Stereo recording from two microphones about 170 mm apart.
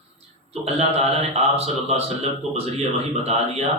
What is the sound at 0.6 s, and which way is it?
Speech, 35° right (ahead or behind).